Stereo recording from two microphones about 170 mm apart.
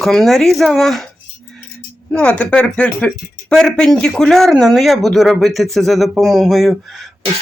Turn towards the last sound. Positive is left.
turn(degrees=0)  # may be behind; listen again after turning